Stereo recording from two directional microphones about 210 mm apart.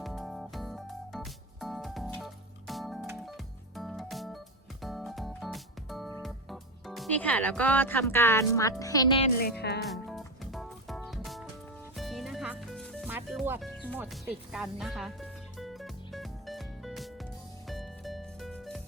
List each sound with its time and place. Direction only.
0.0 s music: centre (ahead or behind)
6.2 s speech: centre (ahead or behind); by 9.3 s 25° left (ahead or behind)
9.4 s music: 50° left (ahead or behind)
9.9 s music: centre (ahead or behind)